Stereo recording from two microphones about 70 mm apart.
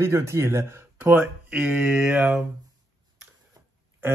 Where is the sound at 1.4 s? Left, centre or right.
Centre.